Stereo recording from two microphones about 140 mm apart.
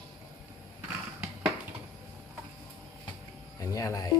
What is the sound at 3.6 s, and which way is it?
Speech, 25° left (ahead or behind).